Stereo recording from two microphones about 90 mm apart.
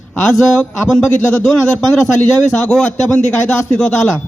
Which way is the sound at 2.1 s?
15° left (ahead or behind).